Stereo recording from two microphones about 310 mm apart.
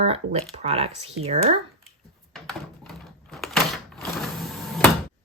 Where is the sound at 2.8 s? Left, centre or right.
Centre.